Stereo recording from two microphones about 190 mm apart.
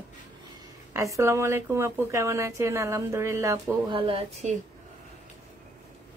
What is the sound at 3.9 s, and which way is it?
Speech, 30° right (ahead or behind).